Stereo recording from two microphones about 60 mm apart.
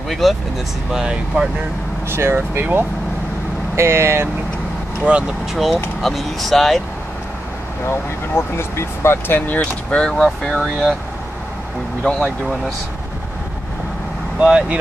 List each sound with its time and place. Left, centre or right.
0.1 s speech: centre
0.9 s speech: centre
2.0 s speech: right
3.7 s speech: right
5.1 s speech: centre
5.5 s speech: centre
7.9 s speech: left
9.5 s speech: left
10.6 s speech: centre
14.4 s speech: centre